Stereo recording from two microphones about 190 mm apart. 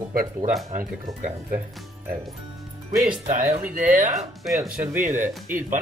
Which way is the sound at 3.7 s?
45° right (ahead or behind).